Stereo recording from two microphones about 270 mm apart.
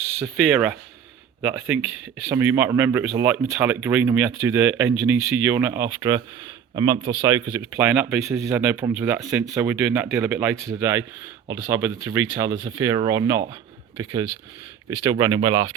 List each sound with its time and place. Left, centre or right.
0.2 s speech: centre